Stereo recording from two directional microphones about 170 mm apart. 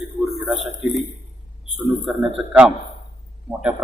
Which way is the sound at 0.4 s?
Centre (ahead or behind).